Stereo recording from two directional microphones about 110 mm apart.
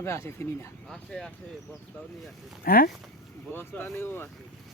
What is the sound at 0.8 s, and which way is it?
Speech, 5° left (ahead or behind).